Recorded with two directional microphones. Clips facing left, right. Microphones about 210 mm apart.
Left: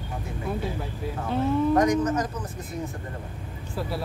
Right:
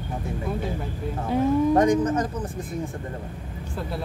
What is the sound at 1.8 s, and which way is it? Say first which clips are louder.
Speech: right 2 dB; 30° right (ahead or behind).